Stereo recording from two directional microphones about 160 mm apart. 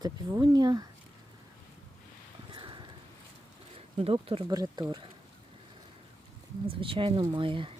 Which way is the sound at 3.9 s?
35° right (ahead or behind).